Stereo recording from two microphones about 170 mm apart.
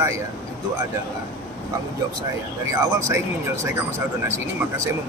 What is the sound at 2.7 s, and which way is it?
Speech, 20° right (ahead or behind).